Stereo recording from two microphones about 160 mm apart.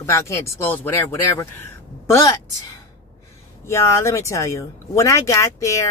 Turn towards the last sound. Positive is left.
turn(degrees=20)  # may be behind; listen again after turning